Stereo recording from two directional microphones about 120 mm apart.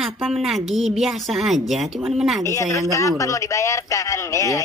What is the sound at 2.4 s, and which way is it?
A man's voice, 25° left (ahead or behind).